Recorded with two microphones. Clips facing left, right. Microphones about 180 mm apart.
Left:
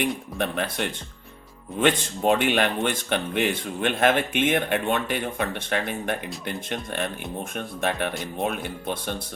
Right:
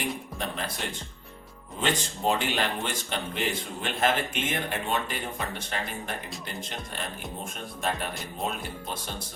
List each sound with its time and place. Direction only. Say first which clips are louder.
0.3 s speech: left 7 dB; 65° left (ahead or behind)
7.5 s speech: left 4 dB; 60° left (ahead or behind)